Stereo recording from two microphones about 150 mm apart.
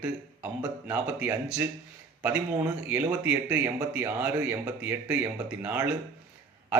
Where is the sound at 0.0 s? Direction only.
10° right (ahead or behind).